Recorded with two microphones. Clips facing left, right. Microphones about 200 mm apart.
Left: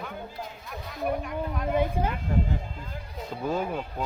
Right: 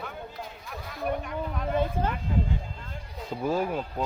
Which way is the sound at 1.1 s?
Centre (ahead or behind).